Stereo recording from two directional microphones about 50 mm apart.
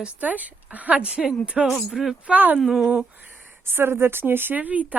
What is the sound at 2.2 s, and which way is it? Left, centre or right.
Speech, right.